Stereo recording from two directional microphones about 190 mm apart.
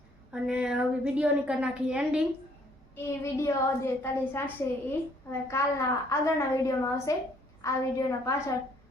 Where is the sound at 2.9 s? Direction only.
15° left (ahead or behind).